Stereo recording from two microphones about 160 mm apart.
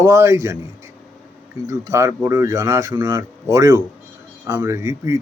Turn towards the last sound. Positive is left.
turn(degrees=-20)  # may be behind; listen again after turning